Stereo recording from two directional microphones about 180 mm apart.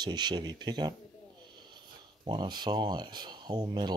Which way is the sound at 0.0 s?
25° right (ahead or behind).